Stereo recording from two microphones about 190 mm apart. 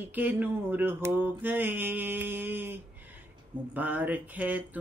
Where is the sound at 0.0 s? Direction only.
10° right (ahead or behind).